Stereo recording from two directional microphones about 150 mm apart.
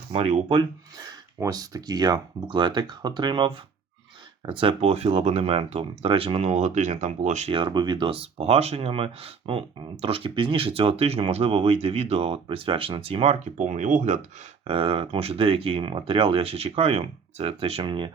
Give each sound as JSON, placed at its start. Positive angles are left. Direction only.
{"t": 0.1, "sound": "speech", "side_deg": -45}
{"t": 0.9, "sound": "speech", "side_deg": -25}
{"t": 7.5, "sound": "speech", "side_deg": -30}
{"t": 13.6, "sound": "speech", "side_deg": -55}
{"t": 14.6, "sound": "speech", "side_deg": -35}